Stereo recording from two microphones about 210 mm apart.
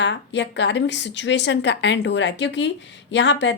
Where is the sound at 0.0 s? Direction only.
55° left (ahead or behind).